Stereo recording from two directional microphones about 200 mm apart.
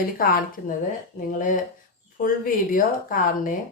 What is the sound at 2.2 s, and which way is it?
Speech, 45° left (ahead or behind).